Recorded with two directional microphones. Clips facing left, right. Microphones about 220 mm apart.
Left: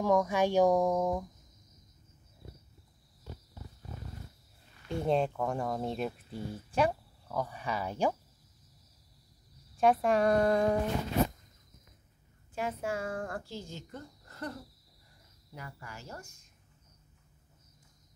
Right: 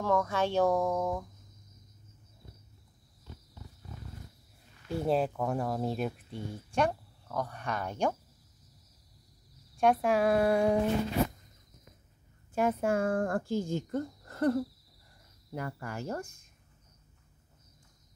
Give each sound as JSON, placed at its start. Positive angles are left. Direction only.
{"t": 0.0, "sound": "speech", "side_deg": 15}
{"t": 4.8, "sound": "speech", "side_deg": -5}
{"t": 9.8, "sound": "speech", "side_deg": 0}
{"t": 12.5, "sound": "speech", "side_deg": -50}